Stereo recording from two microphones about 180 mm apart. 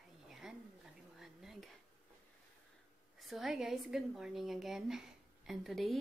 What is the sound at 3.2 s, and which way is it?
A woman's voice, centre (ahead or behind).